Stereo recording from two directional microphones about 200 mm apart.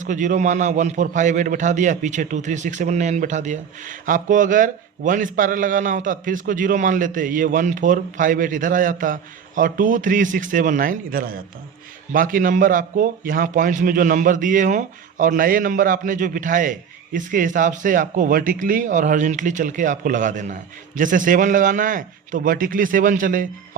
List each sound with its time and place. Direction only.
0.0 s a man's voice: 40° right (ahead or behind)